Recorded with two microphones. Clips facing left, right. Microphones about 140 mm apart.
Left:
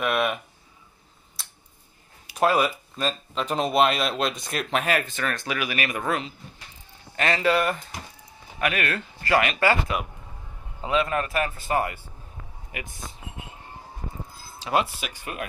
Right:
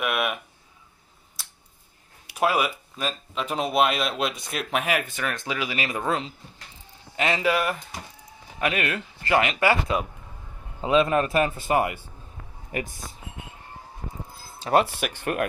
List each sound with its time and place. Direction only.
0.0 s a sound: 10° right (ahead or behind)
2.3 s speech: 10° right (ahead or behind); by 6.3 s 25° right (ahead or behind)
7.2 s speech: 15° right (ahead or behind)
8.5 s a man's voice: 20° right (ahead or behind)
12.7 s speech: 40° right (ahead or behind)
14.6 s speech: 50° right (ahead or behind)